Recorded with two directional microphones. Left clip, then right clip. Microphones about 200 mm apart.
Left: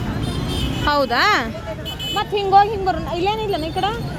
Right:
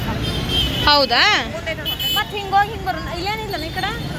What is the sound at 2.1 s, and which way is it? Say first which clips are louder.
A woman's voice: left 5 dB; 50° left (ahead or behind).